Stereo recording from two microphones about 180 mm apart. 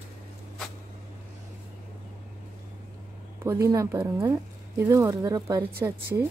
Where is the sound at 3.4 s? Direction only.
15° right (ahead or behind).